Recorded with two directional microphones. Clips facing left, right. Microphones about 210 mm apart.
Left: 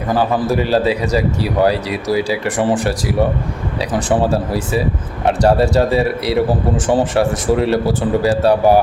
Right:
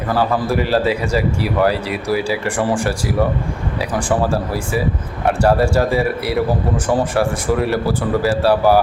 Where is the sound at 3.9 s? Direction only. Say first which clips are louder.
Left 3 dB; 20° left (ahead or behind).